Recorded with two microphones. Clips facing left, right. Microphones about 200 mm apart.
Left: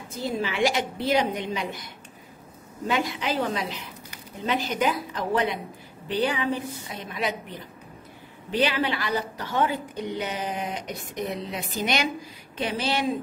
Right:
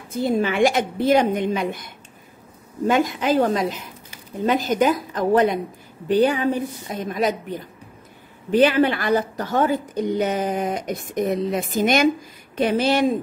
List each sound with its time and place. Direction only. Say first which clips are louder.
0.1 s a woman's voice: right 8 dB; 55° right (ahead or behind)
2.9 s a woman's voice: right 7 dB; 45° right (ahead or behind)
8.5 s a woman's voice: right 8 dB; 50° right (ahead or behind)